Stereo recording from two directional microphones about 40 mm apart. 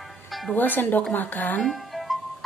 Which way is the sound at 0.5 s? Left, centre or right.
Left.